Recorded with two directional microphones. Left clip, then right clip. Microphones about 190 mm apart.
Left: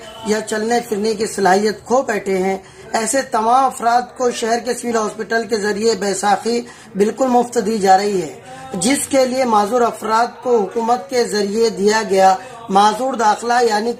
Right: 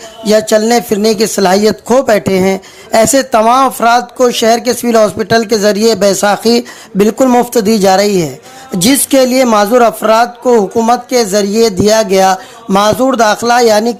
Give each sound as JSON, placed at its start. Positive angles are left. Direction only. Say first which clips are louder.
{"t": 0.3, "sound": "speech", "louder": "right 10 dB", "side_deg": -45}
{"t": 9.1, "sound": "speech", "louder": "right 6 dB", "side_deg": -45}